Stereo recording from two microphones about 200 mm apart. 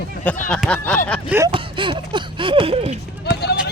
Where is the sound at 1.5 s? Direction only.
25° right (ahead or behind).